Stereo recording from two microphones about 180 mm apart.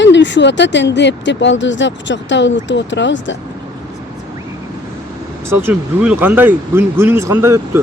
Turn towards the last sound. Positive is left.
turn(degrees=-15)  # may be behind; listen again after turning